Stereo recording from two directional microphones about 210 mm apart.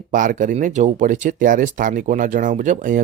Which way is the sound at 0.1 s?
40° right (ahead or behind).